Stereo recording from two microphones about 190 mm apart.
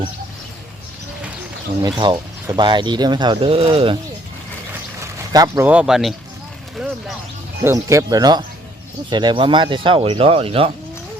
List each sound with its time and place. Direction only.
1.8 s speech: 25° right (ahead or behind)
4.9 s a sound: 20° right (ahead or behind)
5.6 s speech: 5° right (ahead or behind)
7.6 s speech: 15° right (ahead or behind); by 10.7 s 30° right (ahead or behind)